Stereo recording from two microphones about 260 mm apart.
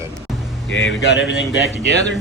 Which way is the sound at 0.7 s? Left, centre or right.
Left.